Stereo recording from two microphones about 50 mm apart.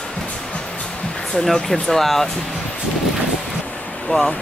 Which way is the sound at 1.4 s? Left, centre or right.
Centre.